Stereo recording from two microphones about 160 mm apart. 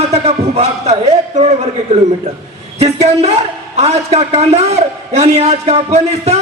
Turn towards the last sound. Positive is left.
turn(degrees=-40)  # may be behind; listen again after turning